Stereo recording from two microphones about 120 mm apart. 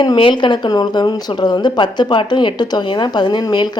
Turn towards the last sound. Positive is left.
turn(degrees=35)  # may be behind; listen again after turning